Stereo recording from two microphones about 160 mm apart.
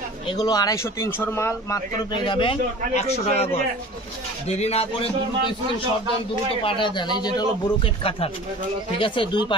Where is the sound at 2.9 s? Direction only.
45° left (ahead or behind).